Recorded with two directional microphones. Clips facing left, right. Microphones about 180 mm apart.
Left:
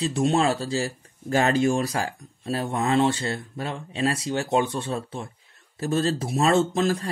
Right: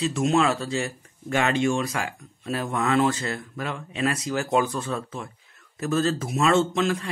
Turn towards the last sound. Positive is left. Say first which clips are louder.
# left 1 dB
turn(degrees=35)  # may be behind; listen again after turning